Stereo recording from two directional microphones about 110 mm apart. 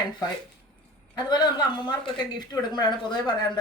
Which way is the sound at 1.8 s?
45° left (ahead or behind).